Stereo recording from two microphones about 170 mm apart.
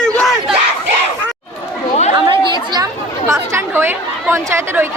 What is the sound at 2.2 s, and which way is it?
Chatter, 30° right (ahead or behind).